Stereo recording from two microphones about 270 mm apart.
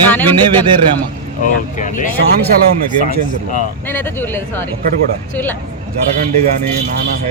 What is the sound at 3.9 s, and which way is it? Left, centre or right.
Speech, centre.